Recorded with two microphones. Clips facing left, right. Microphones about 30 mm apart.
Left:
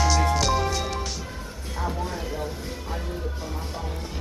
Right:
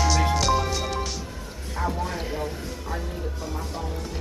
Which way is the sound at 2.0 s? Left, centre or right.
Centre.